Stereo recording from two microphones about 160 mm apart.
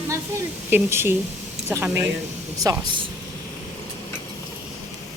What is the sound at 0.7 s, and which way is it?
Speech, 15° right (ahead or behind).